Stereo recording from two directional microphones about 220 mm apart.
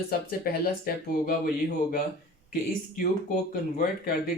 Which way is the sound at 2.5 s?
40° left (ahead or behind).